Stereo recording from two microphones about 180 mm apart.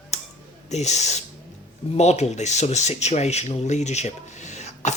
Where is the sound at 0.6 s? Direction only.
40° left (ahead or behind).